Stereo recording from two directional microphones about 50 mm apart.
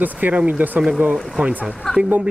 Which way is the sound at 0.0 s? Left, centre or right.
Right.